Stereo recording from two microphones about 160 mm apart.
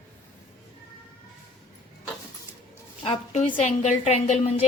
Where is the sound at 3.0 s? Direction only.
45° left (ahead or behind).